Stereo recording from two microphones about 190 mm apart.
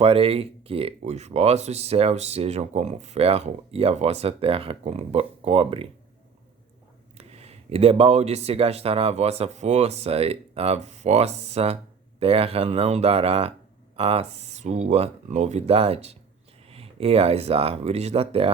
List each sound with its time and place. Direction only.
0.0 s speech: 30° right (ahead or behind)
7.2 s speech: 35° right (ahead or behind)